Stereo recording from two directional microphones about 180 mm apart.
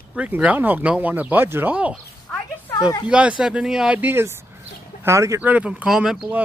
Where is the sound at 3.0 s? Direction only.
5° right (ahead or behind).